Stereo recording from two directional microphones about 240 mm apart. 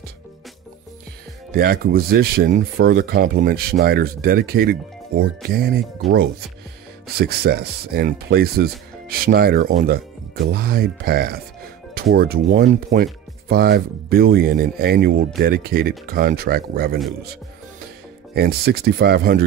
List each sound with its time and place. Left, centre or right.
1.5 s speech: right
6.0 s speech: centre
7.2 s speech: right
18.3 s speech: right